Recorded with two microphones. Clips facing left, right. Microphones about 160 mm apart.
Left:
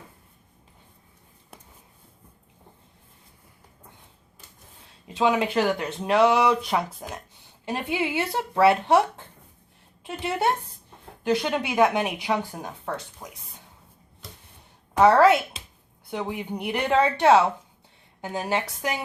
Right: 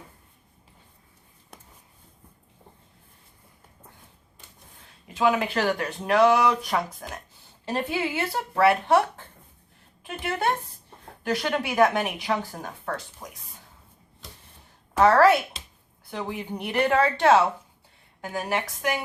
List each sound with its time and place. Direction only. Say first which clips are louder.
5.0 s speech: left 1 dB; 20° left (ahead or behind)
14.9 s speech: left 1 dB; 15° left (ahead or behind)